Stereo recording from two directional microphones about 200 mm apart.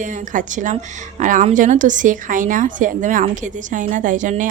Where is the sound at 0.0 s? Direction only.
40° right (ahead or behind).